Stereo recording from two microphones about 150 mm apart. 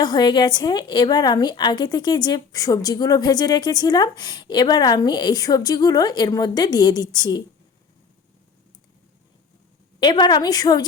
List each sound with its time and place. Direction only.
0.0 s a woman's voice: 30° left (ahead or behind)
10.0 s a woman's voice: 30° left (ahead or behind)